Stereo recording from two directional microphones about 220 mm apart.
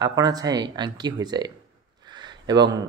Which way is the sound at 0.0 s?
15° right (ahead or behind).